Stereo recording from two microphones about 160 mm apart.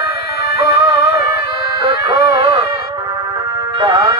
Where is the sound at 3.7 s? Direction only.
25° right (ahead or behind).